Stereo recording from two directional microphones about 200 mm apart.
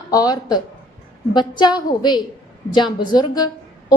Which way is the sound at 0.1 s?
20° left (ahead or behind).